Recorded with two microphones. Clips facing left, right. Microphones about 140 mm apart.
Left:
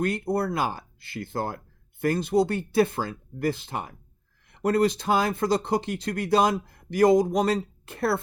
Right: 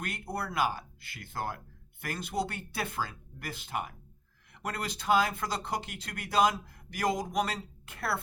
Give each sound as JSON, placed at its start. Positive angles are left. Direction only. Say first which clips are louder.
{"t": 0.0, "sound": "speech", "louder": "left 11 dB", "side_deg": 30}